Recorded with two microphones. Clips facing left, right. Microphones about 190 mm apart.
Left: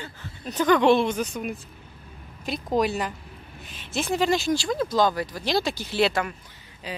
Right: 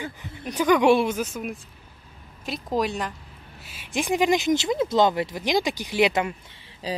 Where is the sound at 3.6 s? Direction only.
10° right (ahead or behind).